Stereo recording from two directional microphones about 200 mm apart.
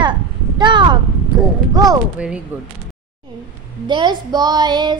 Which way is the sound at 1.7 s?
20° right (ahead or behind).